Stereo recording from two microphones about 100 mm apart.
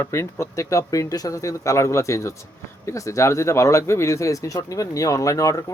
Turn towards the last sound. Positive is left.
turn(degrees=35)  # may be behind; listen again after turning